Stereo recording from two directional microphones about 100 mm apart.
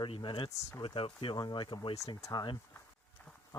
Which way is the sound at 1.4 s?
50° left (ahead or behind).